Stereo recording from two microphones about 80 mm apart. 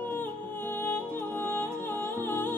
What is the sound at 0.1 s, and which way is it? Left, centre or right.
Music, left.